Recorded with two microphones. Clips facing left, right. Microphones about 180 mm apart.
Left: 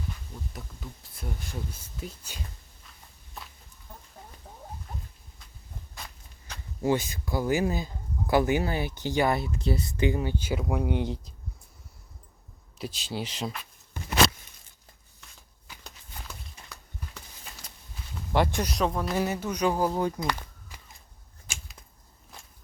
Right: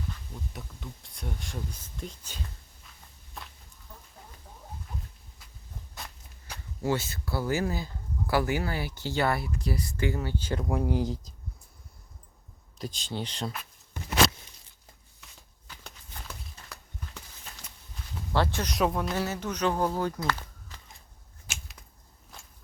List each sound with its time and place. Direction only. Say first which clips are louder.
0.5 s speech: even; centre (ahead or behind)
6.8 s speech: left 3 dB; 15° left (ahead or behind); by 11.3 s centre (ahead or behind)
12.8 s speech: left 1 dB; 5° left (ahead or behind)
15.6 s walk: even; 10° left (ahead or behind)
16.6 s a sound: even; 15° left (ahead or behind)
18.3 s speech: left 2 dB; 15° left (ahead or behind)
18.7 s speech: even; centre (ahead or behind)
19.1 s speech: left 3 dB; 15° left (ahead or behind)
21.4 s a sound: even; 5° right (ahead or behind)